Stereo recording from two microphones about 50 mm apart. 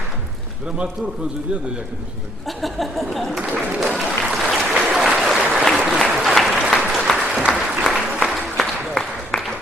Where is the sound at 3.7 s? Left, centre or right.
Centre.